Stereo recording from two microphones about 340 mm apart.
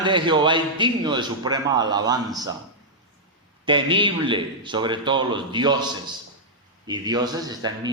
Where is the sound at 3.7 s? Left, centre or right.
Centre.